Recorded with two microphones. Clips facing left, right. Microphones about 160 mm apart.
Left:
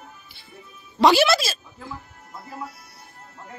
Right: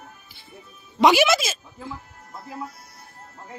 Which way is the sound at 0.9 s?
15° right (ahead or behind).